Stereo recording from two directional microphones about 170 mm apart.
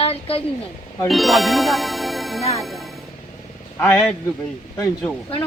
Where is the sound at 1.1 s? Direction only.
Centre (ahead or behind).